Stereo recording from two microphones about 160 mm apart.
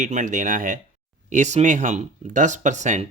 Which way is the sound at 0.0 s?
50° right (ahead or behind).